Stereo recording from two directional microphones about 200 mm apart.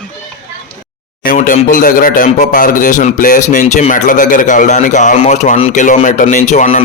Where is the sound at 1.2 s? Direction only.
45° left (ahead or behind).